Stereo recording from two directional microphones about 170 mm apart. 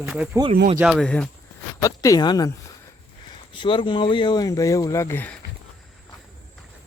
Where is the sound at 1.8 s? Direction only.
20° left (ahead or behind).